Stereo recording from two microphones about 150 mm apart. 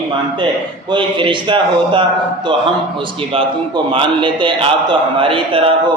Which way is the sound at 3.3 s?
35° right (ahead or behind).